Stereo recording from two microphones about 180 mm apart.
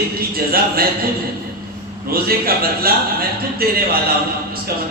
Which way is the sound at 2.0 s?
55° right (ahead or behind).